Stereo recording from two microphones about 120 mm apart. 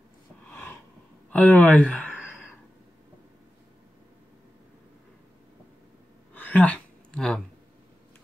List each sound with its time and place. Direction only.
0.5 s snort: 15° left (ahead or behind)
1.3 s speech: 15° left (ahead or behind)
6.3 s a sound: 15° left (ahead or behind)